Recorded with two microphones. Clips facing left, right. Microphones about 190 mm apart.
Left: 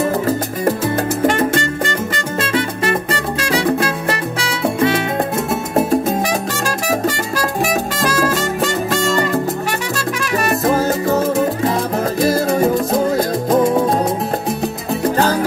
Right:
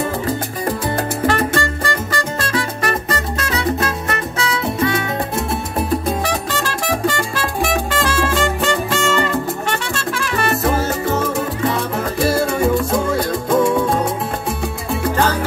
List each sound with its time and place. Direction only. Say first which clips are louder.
1.2 s music: left 2 dB; 20° left (ahead or behind)
4.4 s music: left 1 dB; 30° left (ahead or behind)
6.2 s music: left 2 dB; 10° left (ahead or behind)
10.6 s music: left 3 dB; 40° left (ahead or behind)